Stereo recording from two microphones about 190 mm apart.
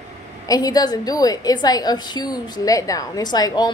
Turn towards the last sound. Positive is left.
turn(degrees=20)  # may be behind; listen again after turning